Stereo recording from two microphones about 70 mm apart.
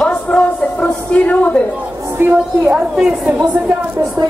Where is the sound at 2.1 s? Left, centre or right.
Right.